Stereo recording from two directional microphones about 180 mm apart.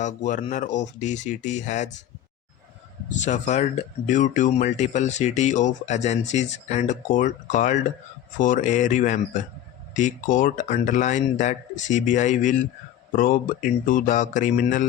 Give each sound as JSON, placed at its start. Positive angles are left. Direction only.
{"t": 0.0, "sound": "speech", "side_deg": 45}
{"t": 3.1, "sound": "speech", "side_deg": 40}